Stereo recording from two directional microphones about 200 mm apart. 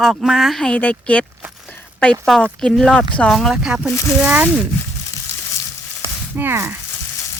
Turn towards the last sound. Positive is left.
turn(degrees=-10)  # may be behind; listen again after turning